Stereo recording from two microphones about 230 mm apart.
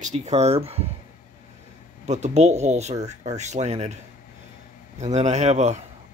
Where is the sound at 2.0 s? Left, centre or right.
Right.